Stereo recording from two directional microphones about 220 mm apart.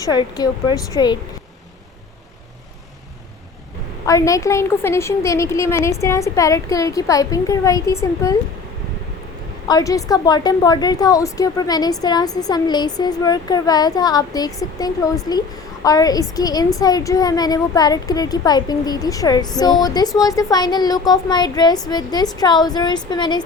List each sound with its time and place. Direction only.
0.0 s speech: 20° left (ahead or behind)
4.0 s a woman's voice: 15° left (ahead or behind)
9.6 s a woman's voice: 15° left (ahead or behind)